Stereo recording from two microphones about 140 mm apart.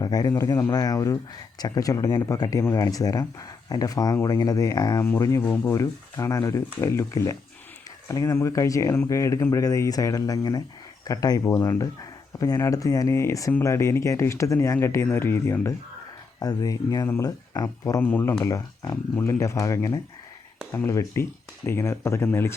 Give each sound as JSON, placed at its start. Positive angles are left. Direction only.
{"t": 0.0, "sound": "speech", "side_deg": 25}
{"t": 16.4, "sound": "speech", "side_deg": 25}
{"t": 18.0, "sound": "speech", "side_deg": 15}